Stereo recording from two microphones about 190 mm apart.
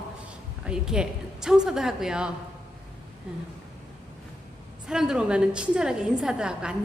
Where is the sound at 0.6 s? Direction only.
5° right (ahead or behind).